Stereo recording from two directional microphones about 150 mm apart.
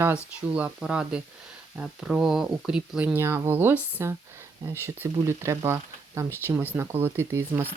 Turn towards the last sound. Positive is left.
turn(degrees=-15)  # may be behind; listen again after turning